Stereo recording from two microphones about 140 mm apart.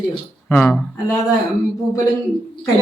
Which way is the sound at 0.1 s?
10° left (ahead or behind).